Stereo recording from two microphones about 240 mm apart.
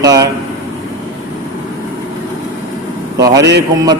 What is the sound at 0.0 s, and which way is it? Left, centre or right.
Air conditioning, centre.